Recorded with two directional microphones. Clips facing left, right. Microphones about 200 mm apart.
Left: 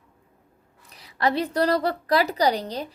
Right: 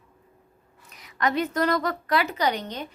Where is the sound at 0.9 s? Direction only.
30° left (ahead or behind).